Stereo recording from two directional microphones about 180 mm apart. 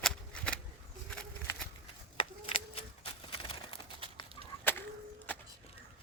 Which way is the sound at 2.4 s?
30° left (ahead or behind).